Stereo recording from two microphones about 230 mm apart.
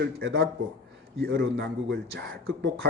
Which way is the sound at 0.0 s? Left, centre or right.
Right.